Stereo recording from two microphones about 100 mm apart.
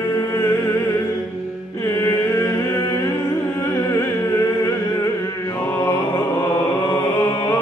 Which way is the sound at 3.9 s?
30° left (ahead or behind).